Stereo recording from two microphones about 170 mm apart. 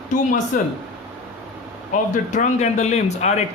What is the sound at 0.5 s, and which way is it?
Speech, 50° left (ahead or behind).